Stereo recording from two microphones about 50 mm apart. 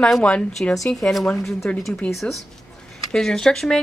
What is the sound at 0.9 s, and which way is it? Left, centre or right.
Speech, centre.